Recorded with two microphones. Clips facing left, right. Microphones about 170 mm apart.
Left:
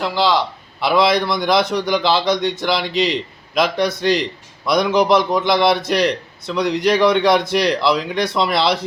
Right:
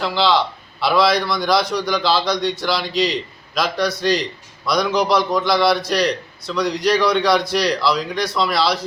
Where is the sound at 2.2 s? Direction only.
50° left (ahead or behind).